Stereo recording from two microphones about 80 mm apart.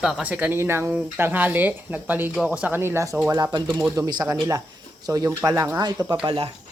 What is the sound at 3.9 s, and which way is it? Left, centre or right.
Speech, right.